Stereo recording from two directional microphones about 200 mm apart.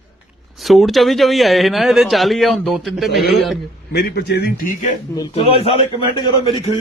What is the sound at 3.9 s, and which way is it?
Speech, 55° left (ahead or behind).